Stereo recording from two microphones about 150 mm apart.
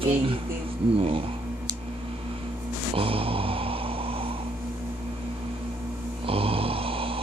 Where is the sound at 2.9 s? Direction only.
40° right (ahead or behind).